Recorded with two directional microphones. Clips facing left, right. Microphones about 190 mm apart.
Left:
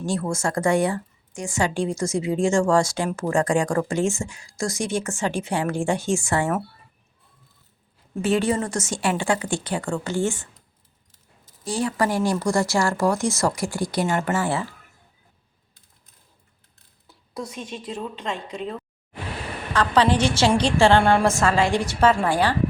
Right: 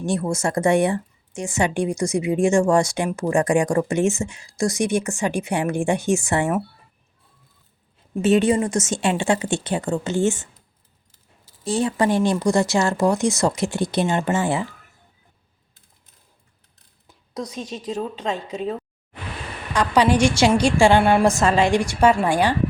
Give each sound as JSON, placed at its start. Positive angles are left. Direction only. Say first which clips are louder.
{"t": 0.0, "sound": "a woman's voice", "louder": "right 2 dB", "side_deg": -20}
{"t": 8.1, "sound": "speech", "louder": "right 4 dB", "side_deg": -20}
{"t": 11.6, "sound": "speech", "louder": "right 3 dB", "side_deg": -25}
{"t": 17.5, "sound": "a woman's voice", "louder": "right 4 dB", "side_deg": -35}
{"t": 19.7, "sound": "a woman's voice", "louder": "right 2 dB", "side_deg": -15}